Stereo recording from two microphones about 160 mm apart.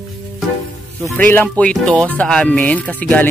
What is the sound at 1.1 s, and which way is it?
Speech, 10° left (ahead or behind).